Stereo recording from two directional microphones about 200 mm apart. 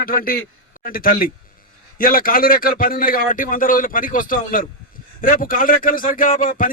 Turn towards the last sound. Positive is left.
turn(degrees=45)  # may be behind; listen again after turning